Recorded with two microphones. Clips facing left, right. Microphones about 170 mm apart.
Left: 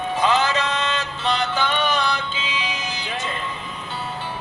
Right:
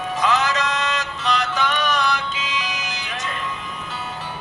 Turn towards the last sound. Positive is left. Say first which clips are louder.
# left 1 dB
turn(degrees=30)  # may be behind; listen again after turning